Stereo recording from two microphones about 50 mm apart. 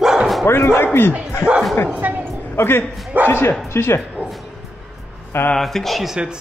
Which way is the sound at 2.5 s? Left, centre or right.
Left.